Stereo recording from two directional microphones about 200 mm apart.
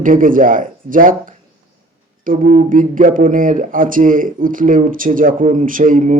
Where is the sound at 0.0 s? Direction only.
45° right (ahead or behind).